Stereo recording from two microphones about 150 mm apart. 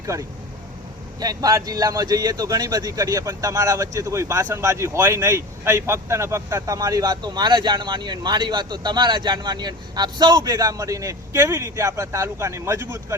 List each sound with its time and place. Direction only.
0.0 s speech: 20° right (ahead or behind)